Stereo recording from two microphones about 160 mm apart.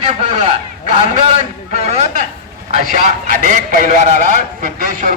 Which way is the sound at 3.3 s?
55° right (ahead or behind).